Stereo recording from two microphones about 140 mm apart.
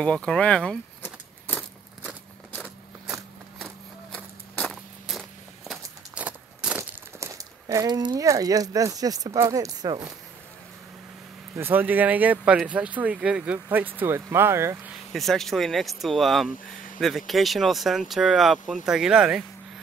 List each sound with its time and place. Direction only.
0.0 s speech: 5° left (ahead or behind)
1.0 s a sound: 10° left (ahead or behind)
3.5 s a sound: 5° left (ahead or behind)
7.2 s speech: 25° right (ahead or behind)
11.5 s speech: 15° right (ahead or behind)
15.1 s speech: centre (ahead or behind)